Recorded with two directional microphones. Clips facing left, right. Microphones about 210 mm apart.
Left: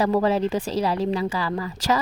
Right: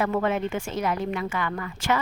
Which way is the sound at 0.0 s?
30° left (ahead or behind).